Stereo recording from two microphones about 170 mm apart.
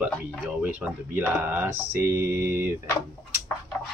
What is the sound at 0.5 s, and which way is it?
Speech, 5° right (ahead or behind).